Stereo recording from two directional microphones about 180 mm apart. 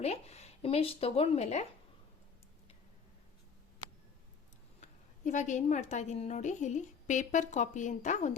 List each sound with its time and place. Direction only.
0.0 s a woman's voice: 35° left (ahead or behind)
4.8 s a woman's voice: 40° left (ahead or behind)